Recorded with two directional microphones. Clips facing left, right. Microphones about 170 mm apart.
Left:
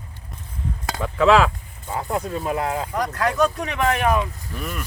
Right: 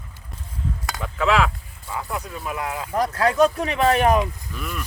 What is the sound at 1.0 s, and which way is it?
Speech, 40° left (ahead or behind).